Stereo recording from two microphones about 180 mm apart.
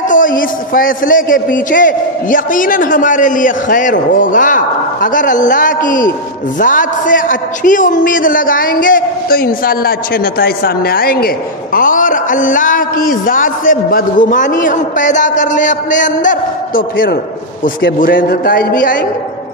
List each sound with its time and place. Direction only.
0.1 s a man's voice: 50° left (ahead or behind)